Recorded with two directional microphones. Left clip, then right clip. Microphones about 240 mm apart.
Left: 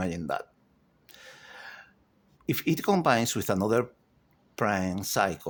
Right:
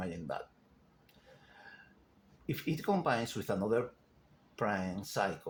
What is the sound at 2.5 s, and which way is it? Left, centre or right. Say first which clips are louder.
Speech: left 8 dB; left.